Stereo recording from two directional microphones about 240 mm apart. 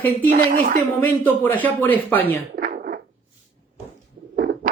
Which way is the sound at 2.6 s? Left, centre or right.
Right.